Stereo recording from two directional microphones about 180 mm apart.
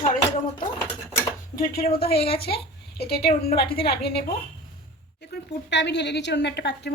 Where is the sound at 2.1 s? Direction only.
30° left (ahead or behind).